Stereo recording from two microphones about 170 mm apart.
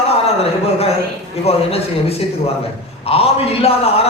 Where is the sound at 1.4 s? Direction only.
35° left (ahead or behind).